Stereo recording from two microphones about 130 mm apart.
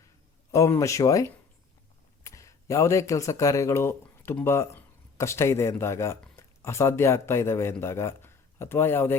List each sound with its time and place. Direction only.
0.5 s speech: 25° left (ahead or behind)